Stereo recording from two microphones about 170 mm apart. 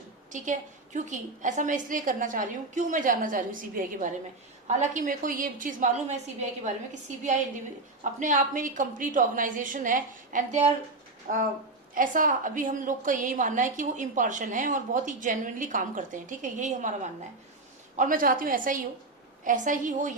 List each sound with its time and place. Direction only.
0.3 s a woman's voice: 45° right (ahead or behind)
11.3 s a woman's voice: 60° right (ahead or behind)